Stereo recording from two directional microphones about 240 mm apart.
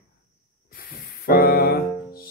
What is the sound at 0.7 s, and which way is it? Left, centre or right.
Music, left.